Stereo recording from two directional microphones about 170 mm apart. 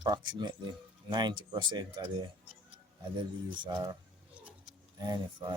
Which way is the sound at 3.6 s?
25° right (ahead or behind).